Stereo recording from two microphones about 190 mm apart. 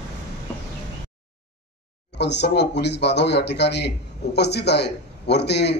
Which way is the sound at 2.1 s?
65° left (ahead or behind).